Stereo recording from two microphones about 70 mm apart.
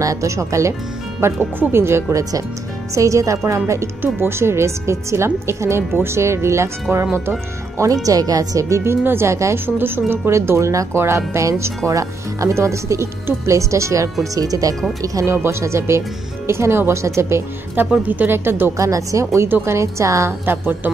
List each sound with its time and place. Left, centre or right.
0.0 s a woman's voice: right
2.9 s a woman's voice: right
7.7 s speech: right
9.0 s a woman's voice: right
9.8 s a woman's voice: right
14.3 s speech: right
15.3 s a woman's voice: right
18.0 s speech: right
18.8 s speech: right
20.4 s a woman's voice: right